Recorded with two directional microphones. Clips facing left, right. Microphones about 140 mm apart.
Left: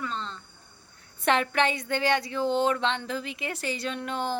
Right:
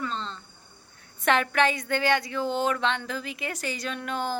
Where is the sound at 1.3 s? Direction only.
30° left (ahead or behind).